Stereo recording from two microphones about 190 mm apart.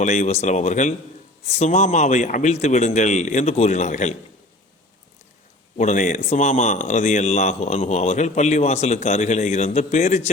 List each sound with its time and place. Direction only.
0.0 s speech: 40° left (ahead or behind)
5.7 s speech: 40° left (ahead or behind)